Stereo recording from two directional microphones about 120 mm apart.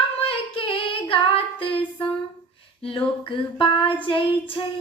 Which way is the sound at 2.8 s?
45° left (ahead or behind).